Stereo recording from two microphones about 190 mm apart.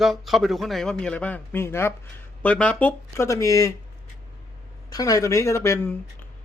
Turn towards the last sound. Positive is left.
turn(degrees=15)  # may be behind; listen again after turning